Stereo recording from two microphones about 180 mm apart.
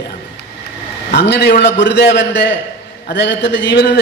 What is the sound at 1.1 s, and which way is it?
A man's voice, 70° left (ahead or behind).